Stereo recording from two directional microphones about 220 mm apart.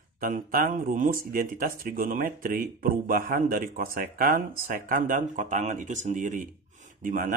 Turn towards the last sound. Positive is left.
turn(degrees=-35)  # may be behind; listen again after turning